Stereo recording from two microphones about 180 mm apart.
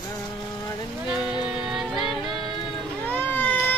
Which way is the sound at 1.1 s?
5° right (ahead or behind).